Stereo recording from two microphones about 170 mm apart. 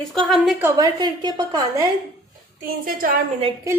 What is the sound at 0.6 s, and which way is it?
A woman's voice, 20° right (ahead or behind).